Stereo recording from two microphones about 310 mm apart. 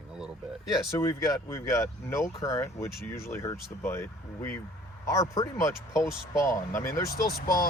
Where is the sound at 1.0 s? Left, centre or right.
Centre.